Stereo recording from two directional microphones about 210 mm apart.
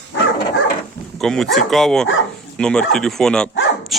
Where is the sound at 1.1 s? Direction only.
Centre (ahead or behind).